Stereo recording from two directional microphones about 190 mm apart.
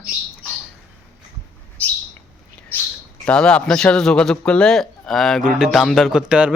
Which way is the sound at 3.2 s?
5° left (ahead or behind).